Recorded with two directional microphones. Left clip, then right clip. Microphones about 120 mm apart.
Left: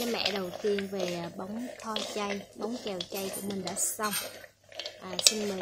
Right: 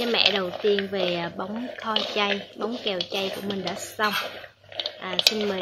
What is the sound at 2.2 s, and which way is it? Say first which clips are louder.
Speech: right 9 dB; 15° left (ahead or behind).